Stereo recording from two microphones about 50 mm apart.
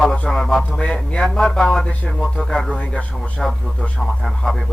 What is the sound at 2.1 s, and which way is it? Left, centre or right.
A man's voice, centre.